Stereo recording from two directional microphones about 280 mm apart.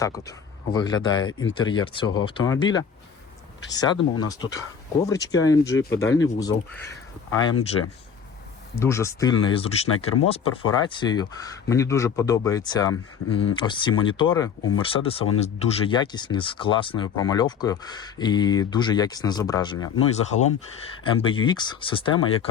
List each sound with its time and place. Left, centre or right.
0.0 s speech: centre
1.3 s speech: left
1.5 s speech: centre
8.7 s speech: centre